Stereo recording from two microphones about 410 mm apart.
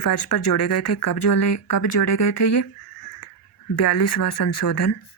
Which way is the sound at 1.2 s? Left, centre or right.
Left.